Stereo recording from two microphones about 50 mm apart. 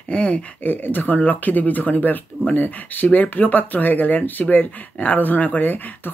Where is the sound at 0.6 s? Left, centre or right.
Left.